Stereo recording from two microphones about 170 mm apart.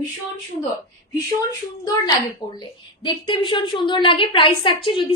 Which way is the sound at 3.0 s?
30° left (ahead or behind).